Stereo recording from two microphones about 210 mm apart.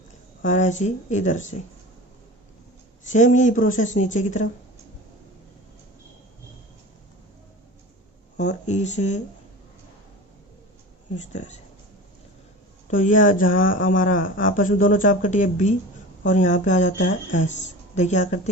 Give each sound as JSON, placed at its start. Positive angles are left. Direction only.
{"t": 0.4, "sound": "speech", "side_deg": 35}
{"t": 3.0, "sound": "speech", "side_deg": 35}
{"t": 8.4, "sound": "speech", "side_deg": 35}
{"t": 11.1, "sound": "speech", "side_deg": 35}
{"t": 12.9, "sound": "a woman's voice", "side_deg": 40}